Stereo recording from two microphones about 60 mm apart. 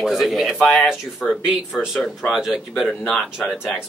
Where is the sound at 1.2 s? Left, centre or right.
Left.